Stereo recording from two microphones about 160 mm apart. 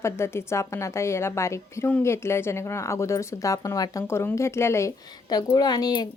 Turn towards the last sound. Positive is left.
turn(degrees=25)  # may be behind; listen again after turning